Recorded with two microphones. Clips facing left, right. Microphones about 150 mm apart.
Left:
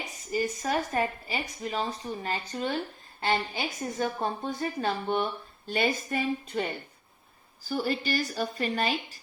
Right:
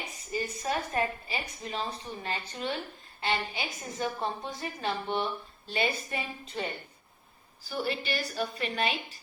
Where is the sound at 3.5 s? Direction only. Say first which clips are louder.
Left 5 dB; 50° left (ahead or behind).